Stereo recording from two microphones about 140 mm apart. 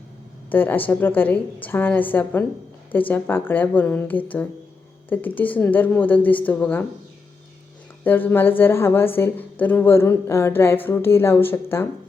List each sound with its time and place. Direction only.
0.5 s a woman's voice: 15° left (ahead or behind)
8.0 s a woman's voice: 15° left (ahead or behind)